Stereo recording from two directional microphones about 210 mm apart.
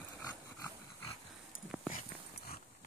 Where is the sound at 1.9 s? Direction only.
40° left (ahead or behind).